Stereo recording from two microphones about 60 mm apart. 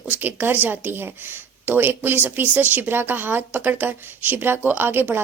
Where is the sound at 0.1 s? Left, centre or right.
Right.